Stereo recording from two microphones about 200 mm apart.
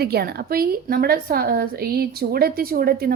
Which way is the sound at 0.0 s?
50° right (ahead or behind).